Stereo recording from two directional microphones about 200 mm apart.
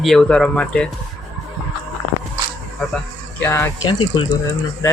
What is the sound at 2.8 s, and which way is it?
Speech, 5° left (ahead or behind).